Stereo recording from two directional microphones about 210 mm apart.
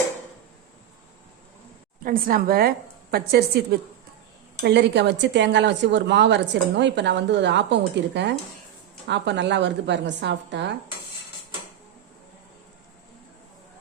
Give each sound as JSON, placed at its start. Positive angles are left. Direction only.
{"t": 2.0, "sound": "a woman's voice", "side_deg": -45}